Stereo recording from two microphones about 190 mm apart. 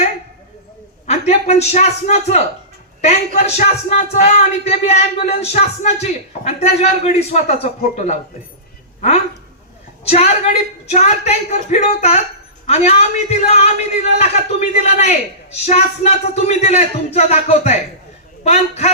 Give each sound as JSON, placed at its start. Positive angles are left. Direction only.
{"t": 1.0, "sound": "a man's voice", "side_deg": 35}